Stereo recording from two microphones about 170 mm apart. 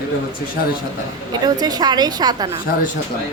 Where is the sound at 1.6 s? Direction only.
25° right (ahead or behind).